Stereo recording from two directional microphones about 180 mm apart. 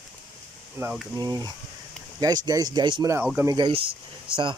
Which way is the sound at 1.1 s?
20° right (ahead or behind).